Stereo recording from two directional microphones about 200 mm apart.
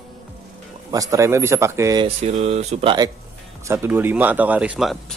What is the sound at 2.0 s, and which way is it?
Speech, 30° right (ahead or behind).